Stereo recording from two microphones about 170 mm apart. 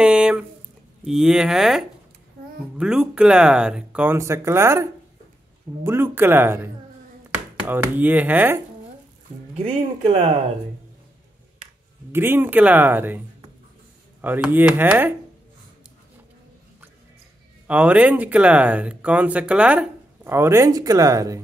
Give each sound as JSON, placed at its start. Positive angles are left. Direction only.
{"t": 0.0, "sound": "speech", "side_deg": -5}
{"t": 9.6, "sound": "speech", "side_deg": -35}
{"t": 12.1, "sound": "speech", "side_deg": -15}
{"t": 14.2, "sound": "speech", "side_deg": -10}
{"t": 17.6, "sound": "speech", "side_deg": -10}